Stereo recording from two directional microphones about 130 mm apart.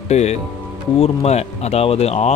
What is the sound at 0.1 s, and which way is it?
Speech, 60° left (ahead or behind).